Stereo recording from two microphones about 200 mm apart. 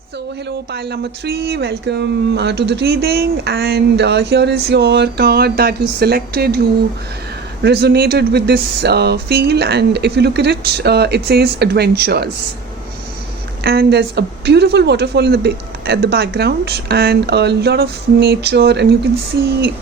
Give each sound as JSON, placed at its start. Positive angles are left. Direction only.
{"t": 0.7, "sound": "speech", "side_deg": -55}
{"t": 7.6, "sound": "speech", "side_deg": -55}
{"t": 13.7, "sound": "speech", "side_deg": -55}